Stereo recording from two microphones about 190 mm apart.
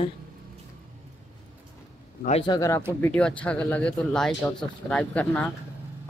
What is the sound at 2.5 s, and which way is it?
Speech, 15° left (ahead or behind).